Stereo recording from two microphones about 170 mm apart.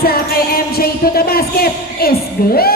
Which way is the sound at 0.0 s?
65° left (ahead or behind).